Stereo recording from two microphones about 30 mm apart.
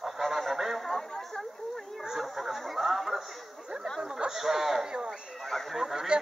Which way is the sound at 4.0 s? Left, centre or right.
Right.